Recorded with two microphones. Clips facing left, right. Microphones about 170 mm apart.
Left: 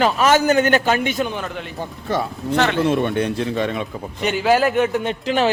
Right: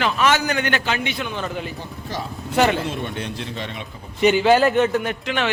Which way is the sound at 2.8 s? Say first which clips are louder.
Left 9 dB; 60° left (ahead or behind).